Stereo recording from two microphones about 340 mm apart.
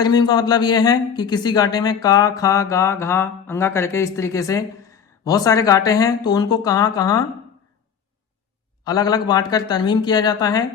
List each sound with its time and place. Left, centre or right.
0.0 s speech: centre
8.8 s speech: centre